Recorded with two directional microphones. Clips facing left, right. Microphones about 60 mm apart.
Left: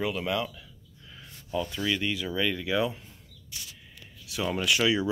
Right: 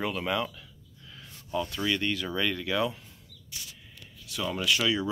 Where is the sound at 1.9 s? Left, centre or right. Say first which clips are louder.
Even; centre.